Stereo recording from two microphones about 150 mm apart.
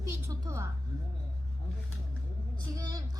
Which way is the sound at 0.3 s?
20° right (ahead or behind).